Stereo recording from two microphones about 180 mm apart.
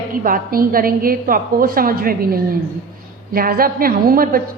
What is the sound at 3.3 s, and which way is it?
A woman's voice, 55° right (ahead or behind).